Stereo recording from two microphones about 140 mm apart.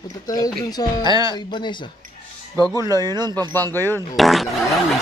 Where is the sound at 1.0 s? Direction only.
25° right (ahead or behind).